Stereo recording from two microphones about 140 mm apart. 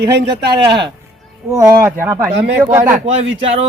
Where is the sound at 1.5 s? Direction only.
20° right (ahead or behind).